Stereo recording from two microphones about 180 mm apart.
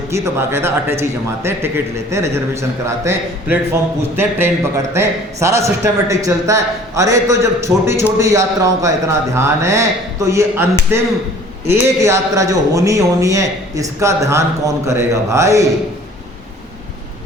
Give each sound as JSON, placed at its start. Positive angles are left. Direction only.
{"t": 0.1, "sound": "a man's voice", "side_deg": -15}